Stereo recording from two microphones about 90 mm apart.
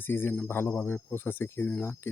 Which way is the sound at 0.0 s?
25° left (ahead or behind).